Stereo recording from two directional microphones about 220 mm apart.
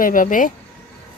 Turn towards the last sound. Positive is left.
turn(degrees=35)  # may be behind; listen again after turning